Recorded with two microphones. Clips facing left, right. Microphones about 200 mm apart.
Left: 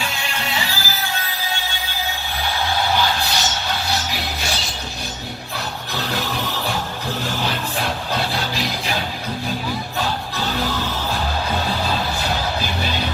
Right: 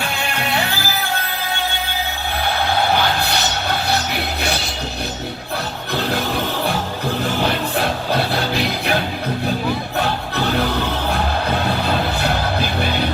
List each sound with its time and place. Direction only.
0.0 s music: 60° right (ahead or behind)
2.5 s a sound: 60° right (ahead or behind)
7.4 s music: 60° right (ahead or behind)
10.0 s music: 60° right (ahead or behind)
11.9 s music: 60° right (ahead or behind)